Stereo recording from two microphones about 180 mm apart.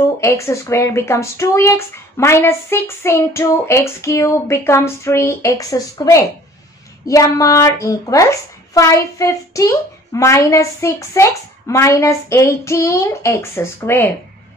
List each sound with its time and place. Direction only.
0.2 s speech: 15° left (ahead or behind)